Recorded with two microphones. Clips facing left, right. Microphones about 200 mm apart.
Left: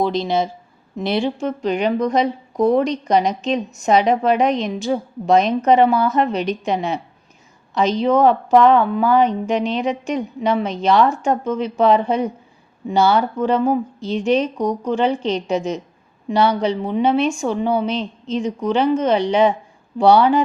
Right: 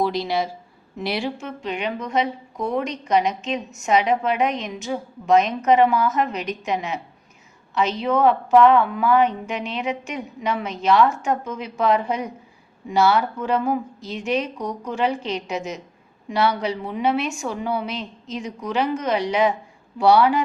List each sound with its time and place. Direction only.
0.0 s a woman's voice: 20° left (ahead or behind)